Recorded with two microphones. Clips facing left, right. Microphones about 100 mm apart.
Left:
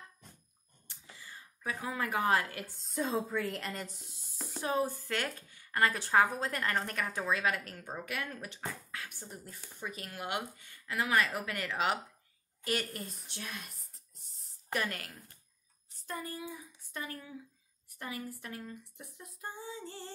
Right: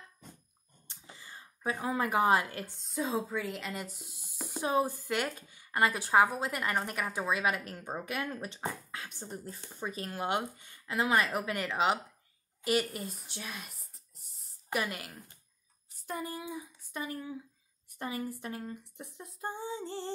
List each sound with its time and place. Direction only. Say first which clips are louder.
0.8 s a sound: right 1 dB; 25° right (ahead or behind)
2.8 s speech: even; centre (ahead or behind); by 12.0 s 20° right (ahead or behind)
12.6 s a woman's voice: right 5 dB; 10° right (ahead or behind); by 20.1 s 25° right (ahead or behind)